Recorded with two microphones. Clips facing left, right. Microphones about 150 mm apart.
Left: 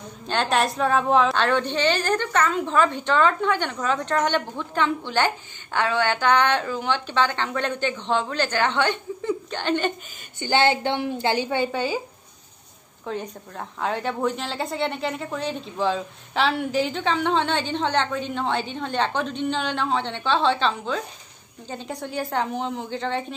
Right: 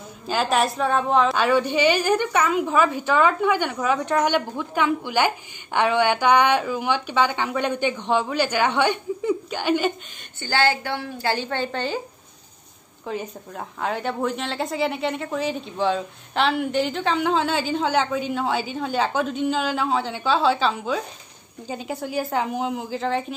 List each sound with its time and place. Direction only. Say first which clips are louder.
0.3 s a woman's voice: right 1 dB; centre (ahead or behind)
10.4 s a woman's voice: left 2 dB; 20° left (ahead or behind)
13.0 s a woman's voice: right 1 dB; 5° right (ahead or behind)